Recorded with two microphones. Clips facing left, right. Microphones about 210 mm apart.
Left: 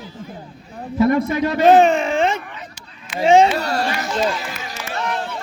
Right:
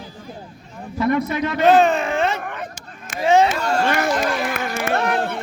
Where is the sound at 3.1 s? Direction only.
20° left (ahead or behind).